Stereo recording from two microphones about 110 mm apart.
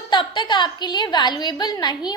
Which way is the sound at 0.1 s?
45° left (ahead or behind).